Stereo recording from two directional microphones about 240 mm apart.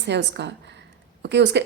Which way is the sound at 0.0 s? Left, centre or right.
Right.